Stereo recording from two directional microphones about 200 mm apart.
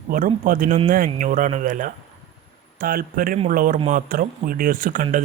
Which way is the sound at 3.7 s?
30° right (ahead or behind).